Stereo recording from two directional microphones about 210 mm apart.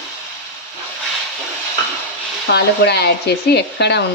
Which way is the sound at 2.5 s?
50° left (ahead or behind).